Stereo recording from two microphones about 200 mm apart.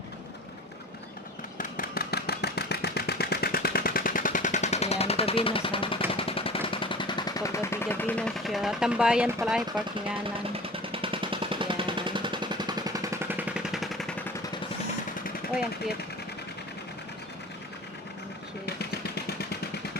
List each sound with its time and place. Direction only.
1.5 s vehicle: 45° left (ahead or behind); by 6.0 s 25° left (ahead or behind)
6.1 s machine gun: 30° left (ahead or behind); by 9.8 s centre (ahead or behind)
10.5 s a sound: 25° right (ahead or behind); by 14.2 s centre (ahead or behind)
18.6 s vehicle: 55° left (ahead or behind)